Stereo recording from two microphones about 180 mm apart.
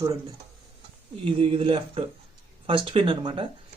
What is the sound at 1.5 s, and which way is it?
Speech, 30° right (ahead or behind).